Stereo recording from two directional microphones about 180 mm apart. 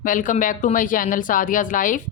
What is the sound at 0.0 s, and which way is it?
Speech, 45° left (ahead or behind).